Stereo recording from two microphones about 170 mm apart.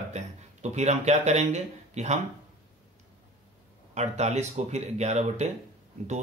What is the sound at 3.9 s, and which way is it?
A man's voice, 40° right (ahead or behind).